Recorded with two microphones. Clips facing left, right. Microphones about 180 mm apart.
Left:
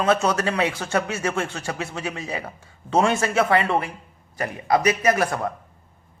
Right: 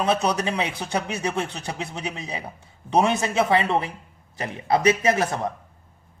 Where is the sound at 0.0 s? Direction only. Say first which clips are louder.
Left 2 dB; 15° right (ahead or behind).